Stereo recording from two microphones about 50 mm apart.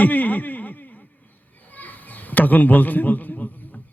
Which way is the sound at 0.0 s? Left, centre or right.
Left.